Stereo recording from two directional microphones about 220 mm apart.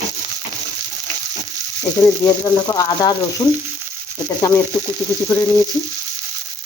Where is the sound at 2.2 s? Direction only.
15° left (ahead or behind).